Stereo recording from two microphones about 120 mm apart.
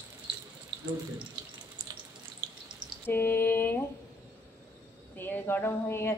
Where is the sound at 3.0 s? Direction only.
15° left (ahead or behind).